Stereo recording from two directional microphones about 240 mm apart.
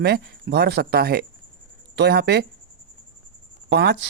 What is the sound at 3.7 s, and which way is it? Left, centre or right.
Speech, right.